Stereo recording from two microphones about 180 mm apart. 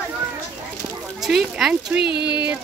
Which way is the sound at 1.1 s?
Centre (ahead or behind).